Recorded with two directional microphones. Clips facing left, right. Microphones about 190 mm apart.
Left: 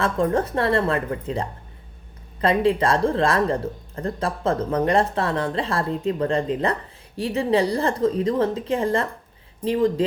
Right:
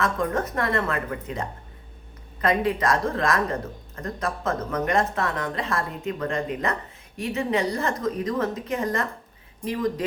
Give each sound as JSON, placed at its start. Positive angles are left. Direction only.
{"t": 0.0, "sound": "speech", "side_deg": 30}
{"t": 2.6, "sound": "speech", "side_deg": 30}